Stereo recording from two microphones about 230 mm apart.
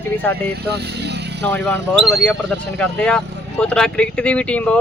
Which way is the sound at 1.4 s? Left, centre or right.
Centre.